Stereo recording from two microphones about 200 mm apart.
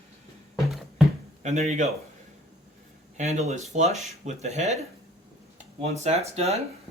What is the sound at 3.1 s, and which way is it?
Speech, 35° right (ahead or behind).